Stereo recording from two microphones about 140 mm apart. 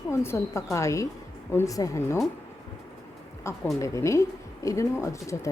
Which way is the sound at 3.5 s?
20° left (ahead or behind).